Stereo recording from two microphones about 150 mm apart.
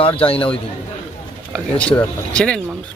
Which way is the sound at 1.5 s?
5° left (ahead or behind).